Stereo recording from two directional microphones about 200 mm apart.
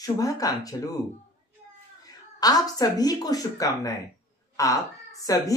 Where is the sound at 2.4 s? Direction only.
20° left (ahead or behind).